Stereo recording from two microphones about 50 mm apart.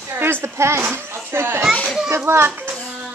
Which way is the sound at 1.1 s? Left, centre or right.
Right.